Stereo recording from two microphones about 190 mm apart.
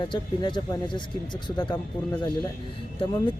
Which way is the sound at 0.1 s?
25° left (ahead or behind).